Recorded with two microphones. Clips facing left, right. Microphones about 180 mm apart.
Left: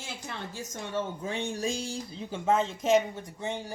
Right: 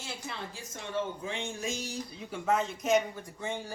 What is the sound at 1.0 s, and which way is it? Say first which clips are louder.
Speech: left 2 dB; 40° left (ahead or behind).